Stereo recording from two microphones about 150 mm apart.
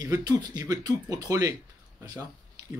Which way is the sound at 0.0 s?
25° right (ahead or behind).